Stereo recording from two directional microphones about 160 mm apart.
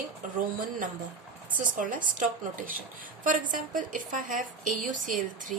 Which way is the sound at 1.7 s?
55° right (ahead or behind).